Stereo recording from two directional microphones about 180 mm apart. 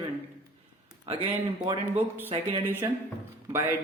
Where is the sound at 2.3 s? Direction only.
35° right (ahead or behind).